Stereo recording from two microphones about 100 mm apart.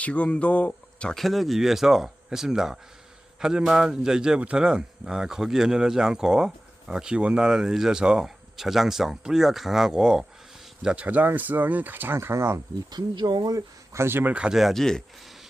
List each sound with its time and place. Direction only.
0.0 s a man's voice: 15° left (ahead or behind); by 12.5 s 25° right (ahead or behind)
12.9 s speech: 45° right (ahead or behind); by 15.0 s 5° left (ahead or behind)